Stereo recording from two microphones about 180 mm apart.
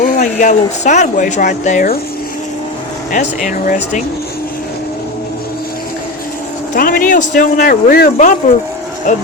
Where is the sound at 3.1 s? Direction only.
45° left (ahead or behind).